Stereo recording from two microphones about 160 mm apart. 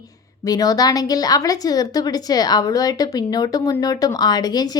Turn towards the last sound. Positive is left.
turn(degrees=25)  # may be behind; listen again after turning